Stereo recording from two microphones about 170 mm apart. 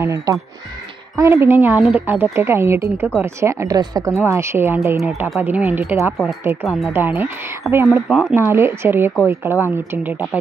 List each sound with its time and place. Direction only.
0.0 s a woman's voice: 20° right (ahead or behind)
8.1 s speech: centre (ahead or behind)
8.4 s a woman's voice: 15° right (ahead or behind)